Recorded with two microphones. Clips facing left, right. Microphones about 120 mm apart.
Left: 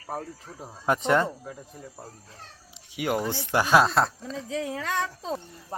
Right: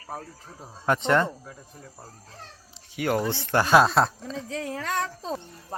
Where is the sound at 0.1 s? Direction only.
10° left (ahead or behind).